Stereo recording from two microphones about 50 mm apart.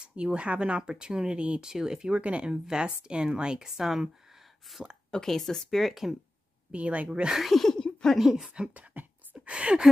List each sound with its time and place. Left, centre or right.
0.0 s speech: right
1.7 s a woman's voice: centre
6.7 s speech: right
7.3 s speech: centre
8.2 s a woman's voice: centre
8.7 s beatboxing: right
9.5 s speech: centre